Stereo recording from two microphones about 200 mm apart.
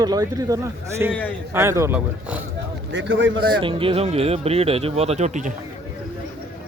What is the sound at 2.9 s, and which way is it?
Speech, 70° right (ahead or behind).